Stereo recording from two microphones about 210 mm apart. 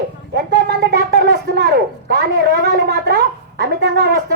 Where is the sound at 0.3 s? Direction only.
50° right (ahead or behind).